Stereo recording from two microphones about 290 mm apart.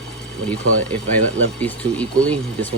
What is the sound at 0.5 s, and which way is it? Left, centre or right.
Speech, centre.